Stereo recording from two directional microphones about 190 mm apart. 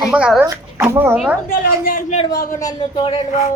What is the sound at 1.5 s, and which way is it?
Speech, 45° left (ahead or behind).